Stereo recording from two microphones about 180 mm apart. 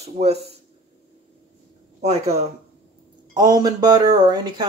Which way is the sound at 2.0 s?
35° right (ahead or behind).